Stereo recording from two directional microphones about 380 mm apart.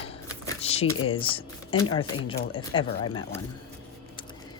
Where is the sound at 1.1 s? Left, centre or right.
Centre.